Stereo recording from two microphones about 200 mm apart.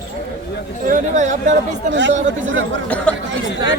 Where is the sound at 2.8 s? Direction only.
5° left (ahead or behind).